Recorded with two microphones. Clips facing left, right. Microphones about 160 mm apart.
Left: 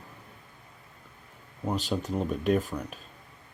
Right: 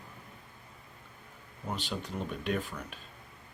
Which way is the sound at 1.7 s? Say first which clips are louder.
Left 7 dB; 45° left (ahead or behind).